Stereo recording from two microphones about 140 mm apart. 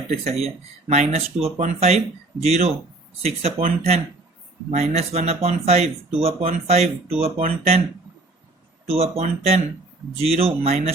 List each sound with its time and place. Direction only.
0.3 s speech: 50° right (ahead or behind)
8.9 s speech: 45° right (ahead or behind)